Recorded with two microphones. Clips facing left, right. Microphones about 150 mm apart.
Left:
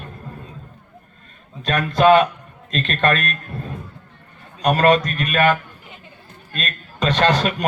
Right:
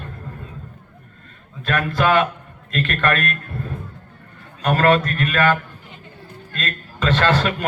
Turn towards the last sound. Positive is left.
turn(degrees=20)  # may be behind; listen again after turning